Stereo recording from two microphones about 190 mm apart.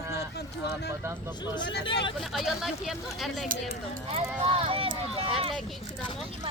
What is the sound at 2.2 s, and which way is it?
Speech, centre (ahead or behind).